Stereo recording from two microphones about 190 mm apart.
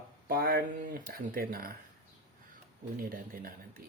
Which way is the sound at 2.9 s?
45° right (ahead or behind).